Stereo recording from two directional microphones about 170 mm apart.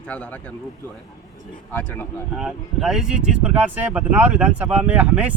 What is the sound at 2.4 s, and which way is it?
Speech, 5° right (ahead or behind).